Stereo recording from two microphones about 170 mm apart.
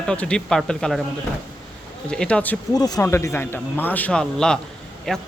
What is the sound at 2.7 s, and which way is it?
Speech, 20° left (ahead or behind).